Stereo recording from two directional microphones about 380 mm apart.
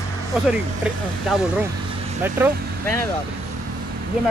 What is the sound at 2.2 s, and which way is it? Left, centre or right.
Speech, centre.